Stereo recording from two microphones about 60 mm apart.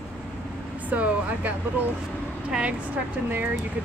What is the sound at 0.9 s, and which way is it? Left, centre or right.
A woman's voice, right.